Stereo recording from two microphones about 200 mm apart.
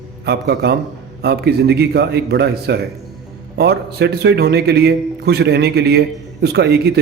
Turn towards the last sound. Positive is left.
turn(degrees=-55)  # may be behind; listen again after turning